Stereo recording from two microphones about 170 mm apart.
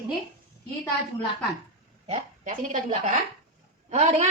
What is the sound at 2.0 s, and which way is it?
Speech, 50° right (ahead or behind).